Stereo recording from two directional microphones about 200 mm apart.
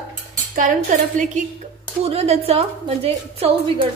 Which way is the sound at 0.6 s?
40° right (ahead or behind).